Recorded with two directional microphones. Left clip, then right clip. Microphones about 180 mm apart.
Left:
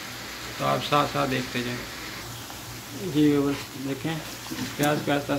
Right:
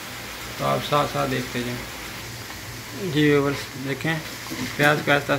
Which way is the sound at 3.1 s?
5° right (ahead or behind).